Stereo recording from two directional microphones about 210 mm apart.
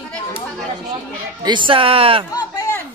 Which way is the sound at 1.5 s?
25° right (ahead or behind).